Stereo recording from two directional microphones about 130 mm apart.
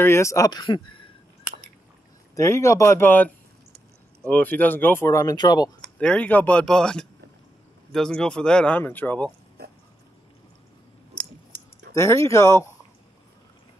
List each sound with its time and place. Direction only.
0.0 s speech: 20° left (ahead or behind); by 1.1 s 40° left (ahead or behind)
2.3 s speech: 20° left (ahead or behind)
5.8 s speech: 10° left (ahead or behind)
11.9 s speech: 20° left (ahead or behind)